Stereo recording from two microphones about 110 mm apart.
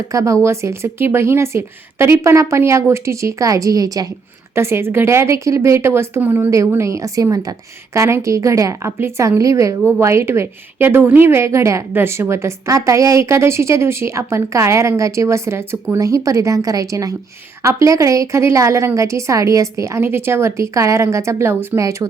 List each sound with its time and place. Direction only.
0.1 s a woman's voice: 30° right (ahead or behind)
4.5 s a woman's voice: 20° right (ahead or behind)